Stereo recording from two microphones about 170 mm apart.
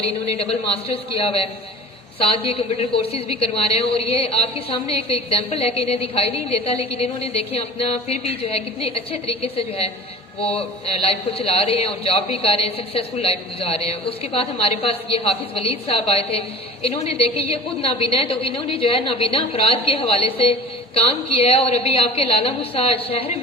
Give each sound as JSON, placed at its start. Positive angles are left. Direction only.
{"t": 0.9, "sound": "a woman's voice", "side_deg": 35}